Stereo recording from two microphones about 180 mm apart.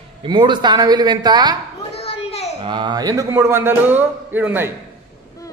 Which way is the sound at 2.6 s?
25° right (ahead or behind).